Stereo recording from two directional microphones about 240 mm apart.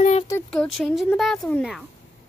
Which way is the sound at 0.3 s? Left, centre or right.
Centre.